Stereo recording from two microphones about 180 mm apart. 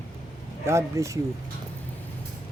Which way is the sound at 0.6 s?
15° right (ahead or behind).